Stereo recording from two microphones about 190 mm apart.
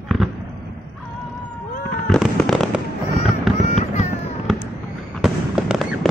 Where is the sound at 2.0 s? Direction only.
5° left (ahead or behind).